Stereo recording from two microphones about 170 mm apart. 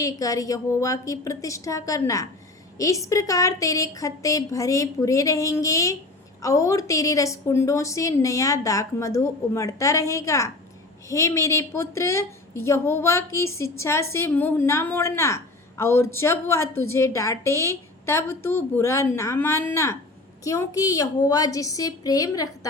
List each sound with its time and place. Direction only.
0.0 s a woman's voice: 20° left (ahead or behind)